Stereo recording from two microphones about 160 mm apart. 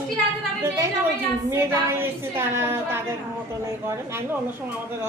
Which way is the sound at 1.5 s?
15° right (ahead or behind).